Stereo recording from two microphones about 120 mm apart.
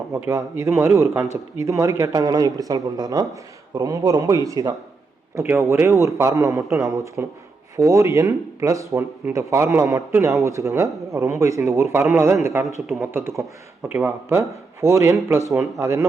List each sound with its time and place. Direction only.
0.3 s a man's voice: 25° right (ahead or behind)
5.3 s a man's voice: 20° right (ahead or behind)